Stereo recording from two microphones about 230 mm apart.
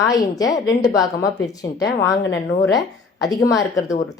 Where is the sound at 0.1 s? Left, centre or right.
Centre.